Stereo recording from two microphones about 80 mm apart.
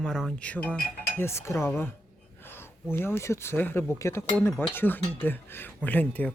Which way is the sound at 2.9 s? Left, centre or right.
Left.